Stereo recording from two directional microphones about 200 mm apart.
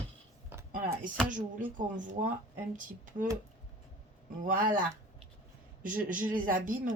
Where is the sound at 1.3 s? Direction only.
40° right (ahead or behind).